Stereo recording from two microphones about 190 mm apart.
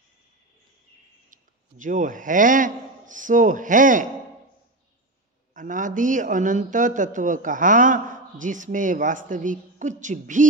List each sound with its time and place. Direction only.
1.3 s a man's voice: 40° right (ahead or behind)
5.5 s a man's voice: 45° right (ahead or behind)